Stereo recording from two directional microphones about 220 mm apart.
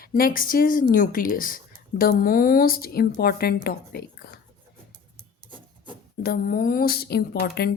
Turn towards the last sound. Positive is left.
turn(degrees=45)  # may be behind; listen again after turning